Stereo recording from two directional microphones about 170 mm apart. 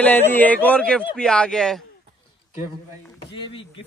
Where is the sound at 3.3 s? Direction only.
30° left (ahead or behind).